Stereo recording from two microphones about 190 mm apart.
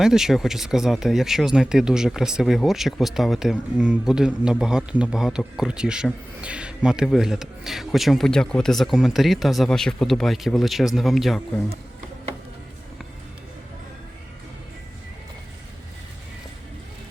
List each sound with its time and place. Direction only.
0.0 s a man's voice: centre (ahead or behind)